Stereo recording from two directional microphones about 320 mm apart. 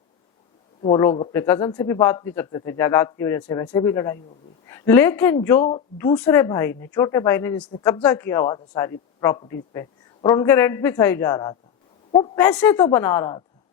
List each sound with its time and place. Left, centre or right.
0.8 s a woman's voice: centre